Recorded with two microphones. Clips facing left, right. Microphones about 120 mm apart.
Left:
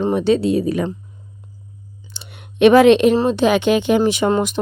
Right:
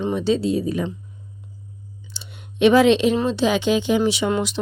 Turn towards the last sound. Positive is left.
turn(degrees=45)  # may be behind; listen again after turning